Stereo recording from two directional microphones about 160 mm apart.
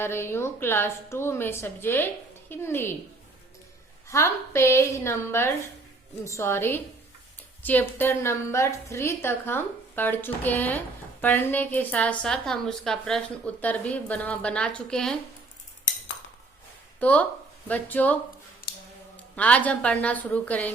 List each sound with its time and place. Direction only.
0.0 s a woman's voice: 15° left (ahead or behind)
4.1 s a woman's voice: 15° left (ahead or behind)
17.0 s a woman's voice: 10° left (ahead or behind)
18.6 s a sound: 70° left (ahead or behind)
19.1 s a woman's voice: 10° left (ahead or behind)